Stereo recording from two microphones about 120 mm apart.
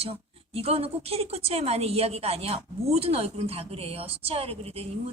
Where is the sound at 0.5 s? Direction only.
55° right (ahead or behind).